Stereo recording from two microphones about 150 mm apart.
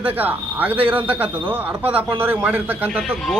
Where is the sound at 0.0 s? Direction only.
10° right (ahead or behind).